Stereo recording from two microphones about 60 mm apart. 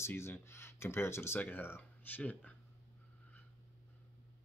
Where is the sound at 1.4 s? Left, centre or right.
Left.